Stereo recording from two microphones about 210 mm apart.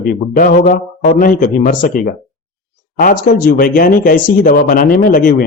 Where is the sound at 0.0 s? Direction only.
45° left (ahead or behind).